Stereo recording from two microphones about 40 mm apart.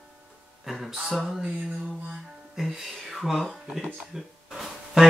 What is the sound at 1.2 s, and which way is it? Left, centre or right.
Speech, centre.